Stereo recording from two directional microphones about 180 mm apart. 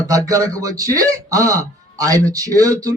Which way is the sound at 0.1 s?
20° right (ahead or behind).